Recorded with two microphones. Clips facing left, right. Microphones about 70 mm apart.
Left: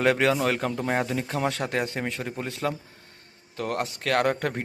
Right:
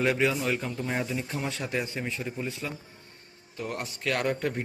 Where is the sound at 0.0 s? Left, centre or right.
Left.